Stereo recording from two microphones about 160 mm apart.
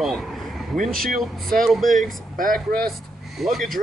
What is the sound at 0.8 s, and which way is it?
Speech, 65° right (ahead or behind).